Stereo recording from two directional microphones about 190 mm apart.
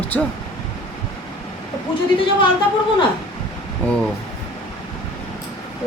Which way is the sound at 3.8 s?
10° left (ahead or behind).